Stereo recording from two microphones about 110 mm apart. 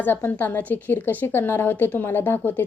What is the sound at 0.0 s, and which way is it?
A woman's voice, 20° left (ahead or behind).